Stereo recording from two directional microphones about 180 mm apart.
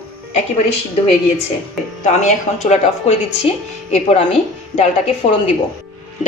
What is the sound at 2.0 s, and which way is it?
Speech, 40° left (ahead or behind).